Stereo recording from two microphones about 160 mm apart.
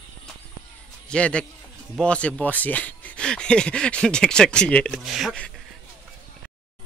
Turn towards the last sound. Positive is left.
turn(degrees=5)  # may be behind; listen again after turning